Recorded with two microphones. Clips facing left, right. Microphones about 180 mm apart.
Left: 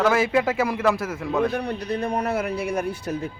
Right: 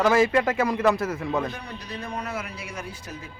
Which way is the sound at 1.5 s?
65° left (ahead or behind).